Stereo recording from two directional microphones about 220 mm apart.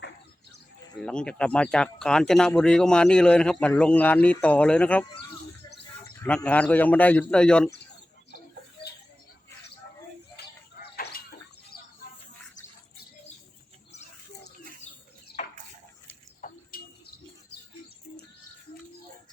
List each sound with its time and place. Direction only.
1.0 s speech: 5° left (ahead or behind)
6.2 s a man's voice: 5° left (ahead or behind)
10.3 s a sound: 45° left (ahead or behind)
15.4 s bathtub: 30° left (ahead or behind)
16.4 s bird: 40° left (ahead or behind)